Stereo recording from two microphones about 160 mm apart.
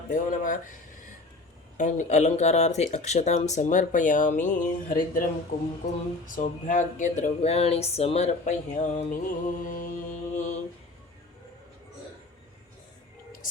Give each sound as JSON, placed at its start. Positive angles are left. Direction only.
{"t": 0.1, "sound": "speech", "side_deg": 55}
{"t": 1.8, "sound": "speech", "side_deg": 50}